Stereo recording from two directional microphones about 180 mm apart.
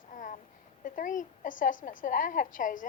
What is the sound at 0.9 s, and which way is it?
A woman's voice, 50° left (ahead or behind).